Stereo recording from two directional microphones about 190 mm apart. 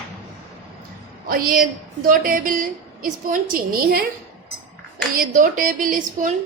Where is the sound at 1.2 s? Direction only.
50° right (ahead or behind).